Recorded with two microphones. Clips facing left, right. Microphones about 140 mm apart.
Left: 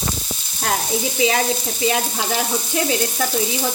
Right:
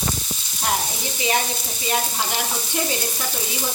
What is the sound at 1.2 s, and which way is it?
Speech, 90° left.